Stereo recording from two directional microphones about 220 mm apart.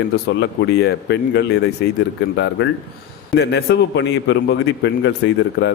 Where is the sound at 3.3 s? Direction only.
50° left (ahead or behind).